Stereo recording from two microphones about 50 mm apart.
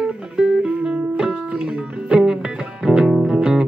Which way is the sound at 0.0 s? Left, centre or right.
Centre.